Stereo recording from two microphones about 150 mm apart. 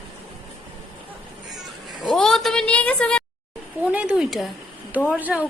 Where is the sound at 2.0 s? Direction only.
Centre (ahead or behind).